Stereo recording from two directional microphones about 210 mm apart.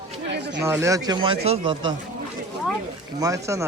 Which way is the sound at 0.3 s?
55° right (ahead or behind).